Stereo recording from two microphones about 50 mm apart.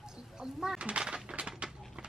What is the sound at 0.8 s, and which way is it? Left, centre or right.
Speech, centre.